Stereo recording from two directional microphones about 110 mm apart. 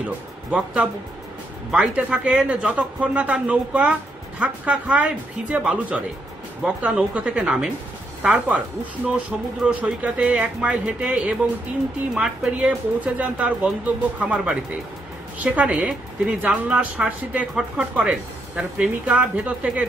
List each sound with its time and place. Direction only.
0.5 s speech: 10° right (ahead or behind)
9.7 s speech: 10° right (ahead or behind)